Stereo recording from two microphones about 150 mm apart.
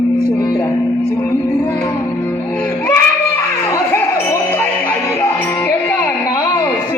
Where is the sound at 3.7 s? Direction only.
15° left (ahead or behind).